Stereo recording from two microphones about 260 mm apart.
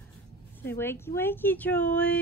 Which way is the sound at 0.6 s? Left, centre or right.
Centre.